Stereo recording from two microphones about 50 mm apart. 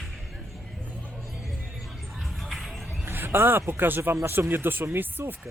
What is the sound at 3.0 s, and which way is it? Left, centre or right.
Speech, right.